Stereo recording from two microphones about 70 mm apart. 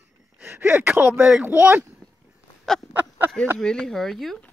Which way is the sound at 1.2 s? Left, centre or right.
Centre.